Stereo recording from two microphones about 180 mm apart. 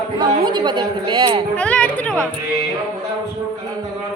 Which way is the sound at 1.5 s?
5° left (ahead or behind).